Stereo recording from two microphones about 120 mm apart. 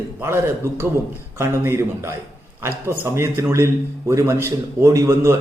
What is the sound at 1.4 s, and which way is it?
A man's voice, 20° right (ahead or behind).